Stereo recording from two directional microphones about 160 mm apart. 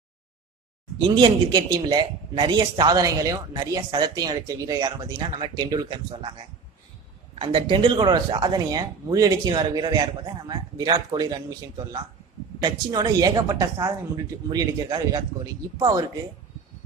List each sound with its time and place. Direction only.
0.9 s speech: 30° right (ahead or behind)
7.3 s speech: 35° right (ahead or behind)
12.6 s speech: 25° right (ahead or behind)